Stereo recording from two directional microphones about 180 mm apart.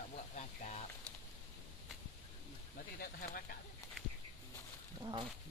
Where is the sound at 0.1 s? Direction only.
40° left (ahead or behind).